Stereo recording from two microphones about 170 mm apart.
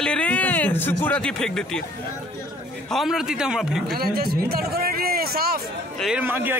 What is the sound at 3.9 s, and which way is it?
Speech, 65° right (ahead or behind).